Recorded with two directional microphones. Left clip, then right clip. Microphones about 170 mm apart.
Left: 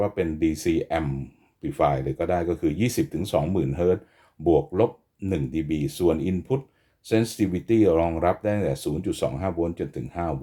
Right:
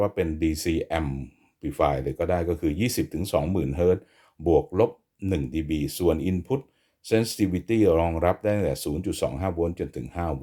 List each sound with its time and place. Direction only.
0.3 s speech: 30° right (ahead or behind)